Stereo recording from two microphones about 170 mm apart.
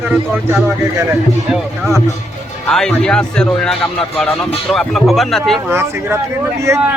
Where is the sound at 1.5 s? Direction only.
5° right (ahead or behind).